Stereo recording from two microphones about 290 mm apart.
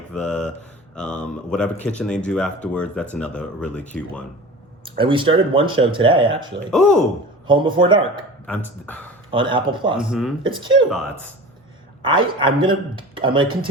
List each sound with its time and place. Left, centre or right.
0.1 s speech: centre
4.9 s speech: centre
6.7 s speech: centre
7.4 s speech: centre
8.4 s speech: centre
9.3 s speech: centre
10.0 s speech: centre
10.4 s speech: centre
10.8 s speech: centre
12.0 s speech: centre